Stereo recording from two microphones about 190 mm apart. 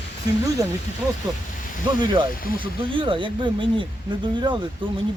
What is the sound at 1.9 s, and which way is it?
Speech, 25° right (ahead or behind).